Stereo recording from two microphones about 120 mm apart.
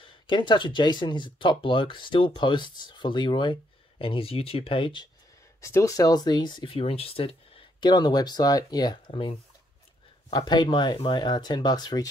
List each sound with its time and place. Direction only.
0.0 s speech: 40° left (ahead or behind)
5.6 s speech: 25° left (ahead or behind); by 7.6 s 50° left (ahead or behind)
7.8 s speech: 35° left (ahead or behind)